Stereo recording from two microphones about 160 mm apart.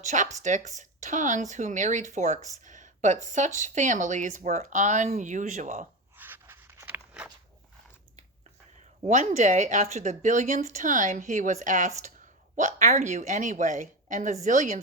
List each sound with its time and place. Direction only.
0.0 s speech: 50° right (ahead or behind)
6.1 s a sound: 10° right (ahead or behind)
9.0 s speech: 45° right (ahead or behind)